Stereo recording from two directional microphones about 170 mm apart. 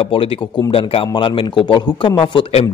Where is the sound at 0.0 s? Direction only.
35° left (ahead or behind).